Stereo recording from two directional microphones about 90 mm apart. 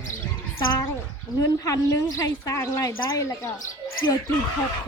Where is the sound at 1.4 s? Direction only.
40° left (ahead or behind).